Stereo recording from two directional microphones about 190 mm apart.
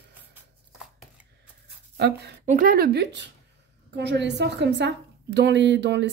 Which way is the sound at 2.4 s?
45° right (ahead or behind).